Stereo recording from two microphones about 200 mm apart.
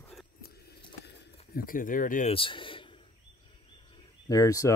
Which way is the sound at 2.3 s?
25° left (ahead or behind).